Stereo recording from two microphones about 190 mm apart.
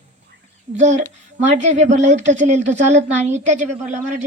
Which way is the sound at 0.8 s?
40° right (ahead or behind).